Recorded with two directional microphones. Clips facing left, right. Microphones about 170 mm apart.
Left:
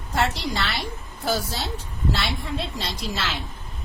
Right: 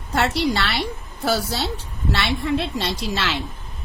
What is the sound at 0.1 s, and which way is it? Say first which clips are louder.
A woman's voice: right 5 dB; 70° right (ahead or behind).